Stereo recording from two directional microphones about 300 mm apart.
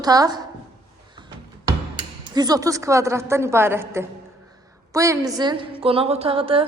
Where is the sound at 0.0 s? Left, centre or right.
Centre.